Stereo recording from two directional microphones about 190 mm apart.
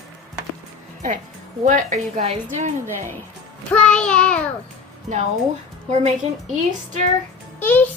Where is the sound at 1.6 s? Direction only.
40° right (ahead or behind).